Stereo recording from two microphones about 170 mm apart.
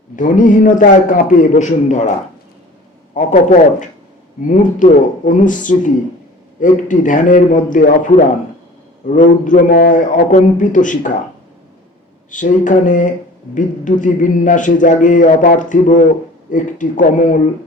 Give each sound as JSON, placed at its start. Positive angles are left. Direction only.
{"t": 0.2, "sound": "speech", "side_deg": 50}
{"t": 3.2, "sound": "speech", "side_deg": 45}
{"t": 12.3, "sound": "speech", "side_deg": 50}